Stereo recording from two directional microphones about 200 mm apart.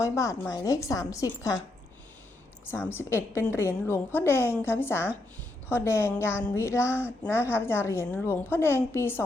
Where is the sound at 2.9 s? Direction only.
10° left (ahead or behind).